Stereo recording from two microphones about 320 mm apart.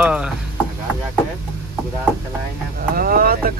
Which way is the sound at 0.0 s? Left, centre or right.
Centre.